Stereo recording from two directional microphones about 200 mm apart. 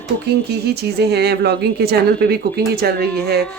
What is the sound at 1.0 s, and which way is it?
Speech, 55° right (ahead or behind).